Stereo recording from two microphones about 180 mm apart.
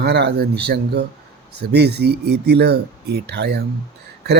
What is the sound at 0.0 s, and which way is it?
Speech, 65° right (ahead or behind).